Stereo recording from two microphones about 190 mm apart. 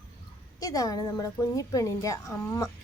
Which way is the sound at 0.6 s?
20° left (ahead or behind).